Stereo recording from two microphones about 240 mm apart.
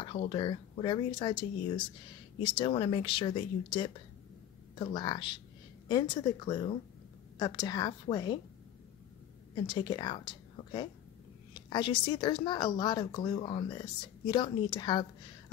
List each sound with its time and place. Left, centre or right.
0.0 s a woman's voice: left
9.7 s a woman's voice: centre